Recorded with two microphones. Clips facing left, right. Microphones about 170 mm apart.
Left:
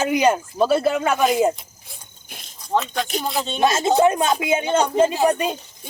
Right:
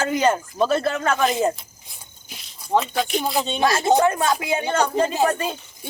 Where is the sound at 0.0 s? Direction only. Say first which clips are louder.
Left 2 dB; 15° left (ahead or behind).